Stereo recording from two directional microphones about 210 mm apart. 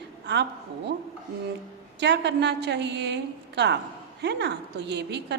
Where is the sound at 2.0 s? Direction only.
55° right (ahead or behind).